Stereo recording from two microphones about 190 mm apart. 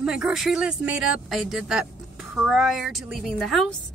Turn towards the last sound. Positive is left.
turn(degrees=0)  # may be behind; listen again after turning